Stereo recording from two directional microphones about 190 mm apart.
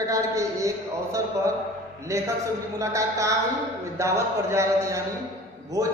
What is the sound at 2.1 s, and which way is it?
Speech, 15° right (ahead or behind).